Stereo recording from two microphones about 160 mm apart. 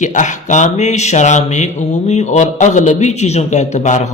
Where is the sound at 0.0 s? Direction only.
50° left (ahead or behind).